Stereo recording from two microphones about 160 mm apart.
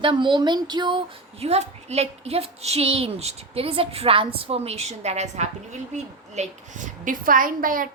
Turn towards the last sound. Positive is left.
turn(degrees=-60)  # may be behind; listen again after turning